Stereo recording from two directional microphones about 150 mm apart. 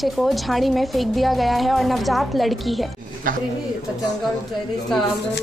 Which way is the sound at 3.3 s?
65° right (ahead or behind).